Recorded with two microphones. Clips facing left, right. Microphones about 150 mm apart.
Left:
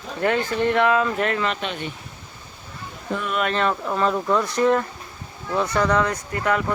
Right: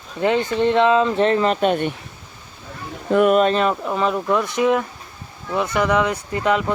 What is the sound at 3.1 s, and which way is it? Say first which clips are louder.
Speech: right 12 dB; 60° right (ahead or behind).